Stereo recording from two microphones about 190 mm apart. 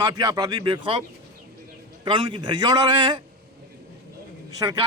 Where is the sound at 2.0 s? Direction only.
25° right (ahead or behind).